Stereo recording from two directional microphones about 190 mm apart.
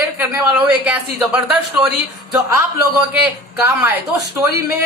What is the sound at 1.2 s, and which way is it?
Speech, centre (ahead or behind).